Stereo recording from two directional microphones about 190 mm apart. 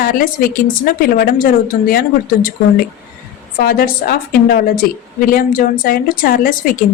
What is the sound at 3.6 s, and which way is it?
A woman's voice, 50° left (ahead or behind).